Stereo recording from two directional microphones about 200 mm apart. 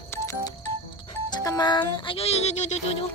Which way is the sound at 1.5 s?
20° left (ahead or behind).